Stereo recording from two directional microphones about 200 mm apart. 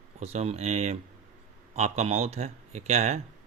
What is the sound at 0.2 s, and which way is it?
Speech, 30° right (ahead or behind).